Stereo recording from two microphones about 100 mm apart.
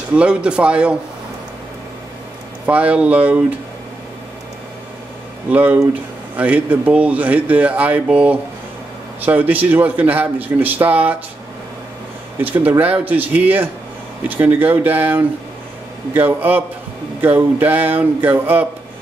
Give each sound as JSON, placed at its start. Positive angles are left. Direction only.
{"t": 0.1, "sound": "speech", "side_deg": -10}
{"t": 2.6, "sound": "speech", "side_deg": -15}
{"t": 5.5, "sound": "speech", "side_deg": -15}
{"t": 12.6, "sound": "speech", "side_deg": -15}